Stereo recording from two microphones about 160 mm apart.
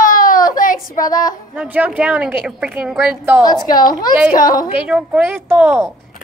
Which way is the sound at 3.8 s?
25° left (ahead or behind).